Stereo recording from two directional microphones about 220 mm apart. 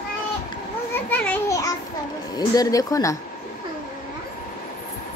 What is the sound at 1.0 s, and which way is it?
Speech, 5° left (ahead or behind).